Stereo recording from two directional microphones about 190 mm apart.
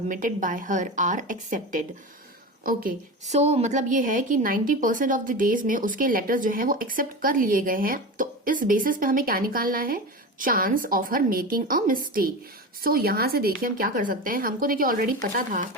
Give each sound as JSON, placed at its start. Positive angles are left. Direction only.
{"t": 0.1, "sound": "a woman's voice", "side_deg": -45}